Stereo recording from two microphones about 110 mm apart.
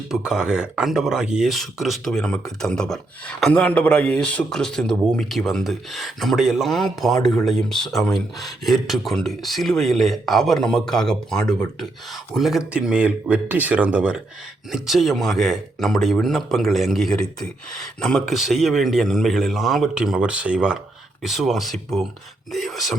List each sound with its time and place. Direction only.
0.1 s speech: 5° right (ahead or behind)